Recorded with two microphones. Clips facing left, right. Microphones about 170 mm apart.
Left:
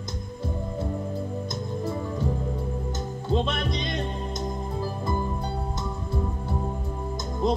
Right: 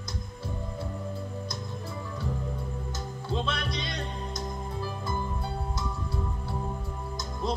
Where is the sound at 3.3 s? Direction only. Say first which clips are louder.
Left 6 dB; 20° left (ahead or behind).